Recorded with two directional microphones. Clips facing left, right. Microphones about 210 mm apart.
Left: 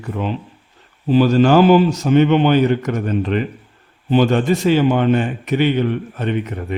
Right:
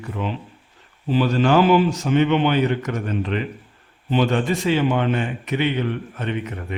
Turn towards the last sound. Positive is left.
turn(degrees=35)  # may be behind; listen again after turning